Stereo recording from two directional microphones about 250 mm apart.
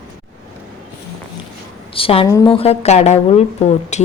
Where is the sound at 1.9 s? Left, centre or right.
Left.